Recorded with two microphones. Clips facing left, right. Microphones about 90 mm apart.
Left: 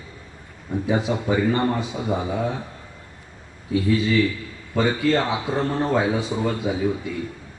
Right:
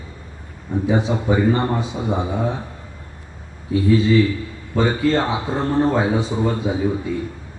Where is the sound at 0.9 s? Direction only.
25° right (ahead or behind).